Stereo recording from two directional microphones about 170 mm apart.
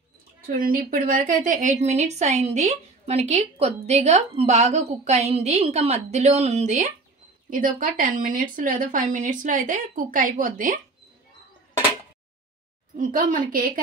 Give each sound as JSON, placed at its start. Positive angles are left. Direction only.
{"t": 0.6, "sound": "a woman's voice", "side_deg": -55}
{"t": 7.4, "sound": "a woman's voice", "side_deg": -55}
{"t": 12.9, "sound": "speech", "side_deg": -55}